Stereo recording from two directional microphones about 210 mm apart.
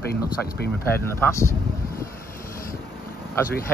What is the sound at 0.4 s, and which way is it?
Speech, 10° left (ahead or behind).